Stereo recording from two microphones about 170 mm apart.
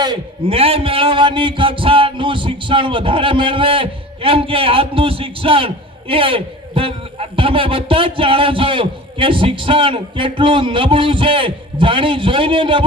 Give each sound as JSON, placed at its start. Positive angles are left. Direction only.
{"t": 0.0, "sound": "a man's voice", "side_deg": -30}